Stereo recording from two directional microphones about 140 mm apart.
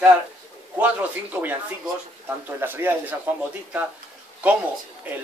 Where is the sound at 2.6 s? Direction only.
15° right (ahead or behind).